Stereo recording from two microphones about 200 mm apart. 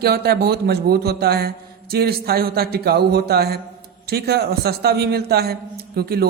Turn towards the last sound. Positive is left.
turn(degrees=-50)  # may be behind; listen again after turning